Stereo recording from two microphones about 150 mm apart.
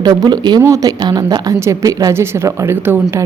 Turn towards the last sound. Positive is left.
turn(degrees=-15)  # may be behind; listen again after turning